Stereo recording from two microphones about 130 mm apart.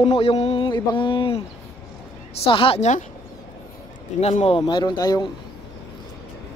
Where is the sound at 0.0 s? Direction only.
50° left (ahead or behind).